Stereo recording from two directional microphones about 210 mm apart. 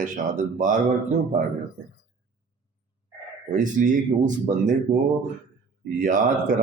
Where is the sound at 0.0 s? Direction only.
40° right (ahead or behind).